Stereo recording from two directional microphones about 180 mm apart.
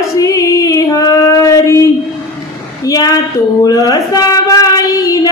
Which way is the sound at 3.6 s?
20° left (ahead or behind).